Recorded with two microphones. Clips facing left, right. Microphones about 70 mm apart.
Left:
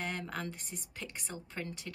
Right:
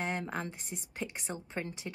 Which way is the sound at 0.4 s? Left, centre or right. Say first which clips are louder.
Right 2 dB; right.